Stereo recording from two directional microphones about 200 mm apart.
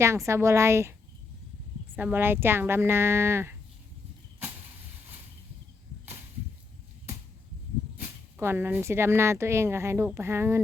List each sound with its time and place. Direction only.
0.3 s speech: 15° right (ahead or behind)
2.0 s speech: 10° right (ahead or behind)
8.4 s speech: 10° right (ahead or behind)